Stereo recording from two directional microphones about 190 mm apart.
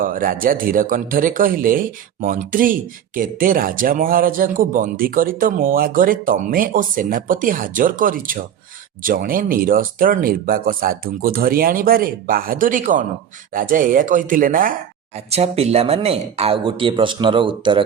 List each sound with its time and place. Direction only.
0.0 s speech: 45° right (ahead or behind)
15.3 s speech: 35° right (ahead or behind)